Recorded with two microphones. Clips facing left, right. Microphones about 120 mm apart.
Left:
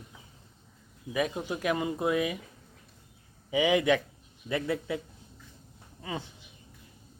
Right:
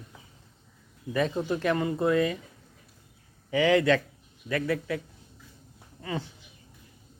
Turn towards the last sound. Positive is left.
turn(degrees=15)  # may be behind; listen again after turning